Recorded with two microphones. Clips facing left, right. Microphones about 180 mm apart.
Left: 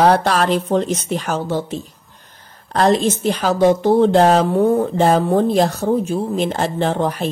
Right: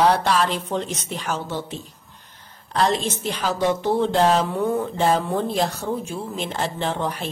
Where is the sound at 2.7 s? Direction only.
50° left (ahead or behind).